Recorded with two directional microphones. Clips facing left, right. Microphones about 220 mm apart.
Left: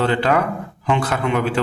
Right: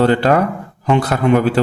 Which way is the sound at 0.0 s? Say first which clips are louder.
Right 5 dB; 40° right (ahead or behind).